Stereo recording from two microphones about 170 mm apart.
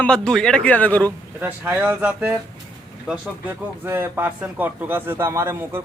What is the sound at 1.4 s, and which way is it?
Speech, 10° right (ahead or behind).